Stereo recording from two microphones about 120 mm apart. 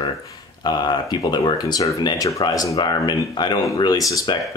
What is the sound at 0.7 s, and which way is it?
Speech, 35° left (ahead or behind).